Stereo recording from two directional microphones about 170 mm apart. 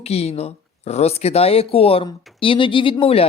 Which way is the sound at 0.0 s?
35° left (ahead or behind).